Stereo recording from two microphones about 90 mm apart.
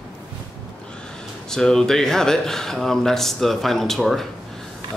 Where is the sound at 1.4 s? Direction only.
5° left (ahead or behind).